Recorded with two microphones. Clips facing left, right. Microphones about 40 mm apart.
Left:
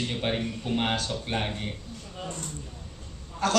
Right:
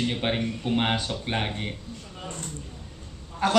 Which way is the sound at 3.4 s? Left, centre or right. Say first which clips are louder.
Right 2 dB; centre.